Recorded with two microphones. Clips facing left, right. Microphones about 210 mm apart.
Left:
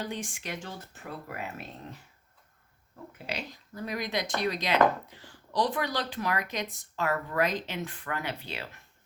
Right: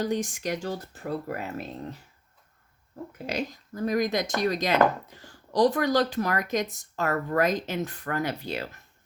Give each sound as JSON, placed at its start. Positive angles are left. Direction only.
{"t": 0.0, "sound": "speech", "side_deg": -40}
{"t": 3.2, "sound": "speech", "side_deg": -45}